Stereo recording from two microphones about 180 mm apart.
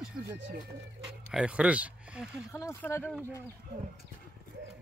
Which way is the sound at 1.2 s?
5° right (ahead or behind).